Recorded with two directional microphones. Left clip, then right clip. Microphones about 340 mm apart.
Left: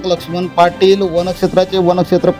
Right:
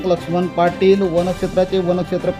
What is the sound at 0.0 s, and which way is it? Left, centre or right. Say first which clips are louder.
Speech: left 1 dB; left.